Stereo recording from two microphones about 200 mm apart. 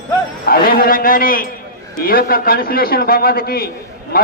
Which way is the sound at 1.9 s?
50° left (ahead or behind).